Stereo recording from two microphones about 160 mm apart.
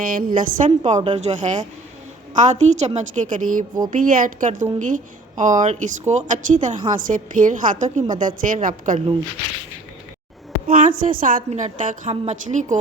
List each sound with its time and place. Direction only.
0.0 s a woman's voice: 60° right (ahead or behind)
0.9 s a woman's voice: 45° right (ahead or behind)
10.7 s a woman's voice: 60° right (ahead or behind)